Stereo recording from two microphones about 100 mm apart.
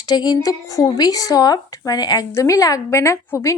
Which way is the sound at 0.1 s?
45° left (ahead or behind).